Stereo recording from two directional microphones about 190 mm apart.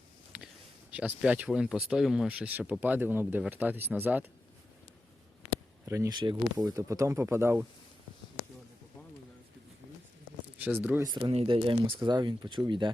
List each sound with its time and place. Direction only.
0.3 s a sound: 5° right (ahead or behind)
0.9 s speech: 10° right (ahead or behind)
5.8 s speech: 15° right (ahead or behind)
10.6 s speech: 10° right (ahead or behind)
11.1 s speech: 25° right (ahead or behind)